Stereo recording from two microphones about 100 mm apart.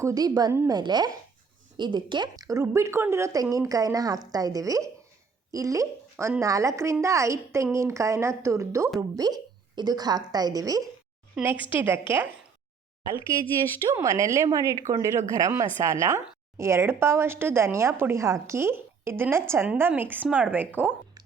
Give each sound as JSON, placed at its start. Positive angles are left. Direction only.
{"t": 0.0, "sound": "speech", "side_deg": -40}
{"t": 11.4, "sound": "a woman's voice", "side_deg": -5}
{"t": 11.7, "sound": "a woman's voice", "side_deg": -20}
{"t": 13.9, "sound": "a woman's voice", "side_deg": -30}